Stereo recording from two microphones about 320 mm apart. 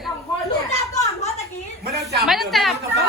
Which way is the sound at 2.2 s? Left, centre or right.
Centre.